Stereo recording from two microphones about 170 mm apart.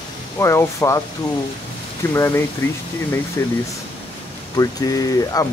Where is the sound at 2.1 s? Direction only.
15° left (ahead or behind).